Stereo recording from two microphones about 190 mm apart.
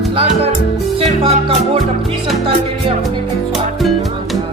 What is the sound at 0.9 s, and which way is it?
Music, 30° right (ahead or behind).